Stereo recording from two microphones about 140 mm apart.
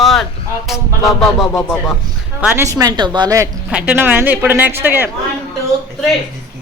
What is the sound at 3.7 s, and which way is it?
Speech, 10° right (ahead or behind).